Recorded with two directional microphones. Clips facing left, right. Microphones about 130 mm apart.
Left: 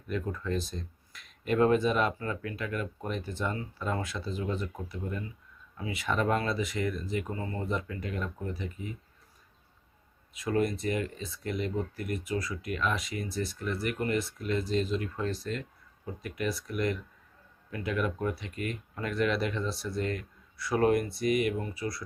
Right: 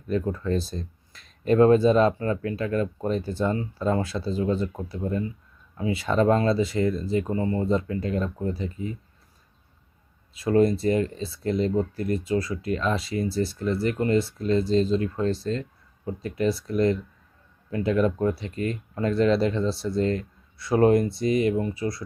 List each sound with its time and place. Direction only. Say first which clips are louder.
0.1 s speech: right 7 dB; 30° right (ahead or behind)
10.3 s speech: right 8 dB; 30° right (ahead or behind)